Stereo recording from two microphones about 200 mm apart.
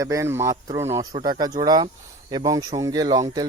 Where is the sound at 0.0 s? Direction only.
15° right (ahead or behind).